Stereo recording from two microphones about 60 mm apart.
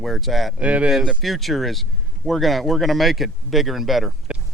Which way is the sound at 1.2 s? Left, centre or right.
Centre.